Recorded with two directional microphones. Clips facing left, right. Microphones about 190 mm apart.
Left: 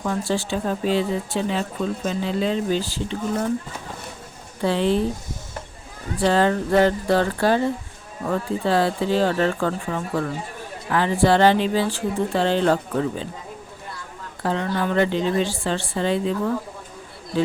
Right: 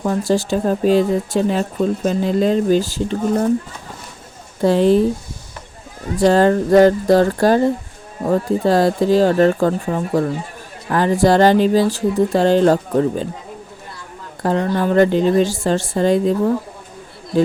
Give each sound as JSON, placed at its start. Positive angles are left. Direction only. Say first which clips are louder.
{"t": 0.0, "sound": "speech", "louder": "right 6 dB", "side_deg": -40}
{"t": 4.6, "sound": "speech", "louder": "right 7 dB", "side_deg": -40}
{"t": 6.1, "sound": "speech", "louder": "right 6 dB", "side_deg": -45}
{"t": 14.4, "sound": "speech", "louder": "right 6 dB", "side_deg": -40}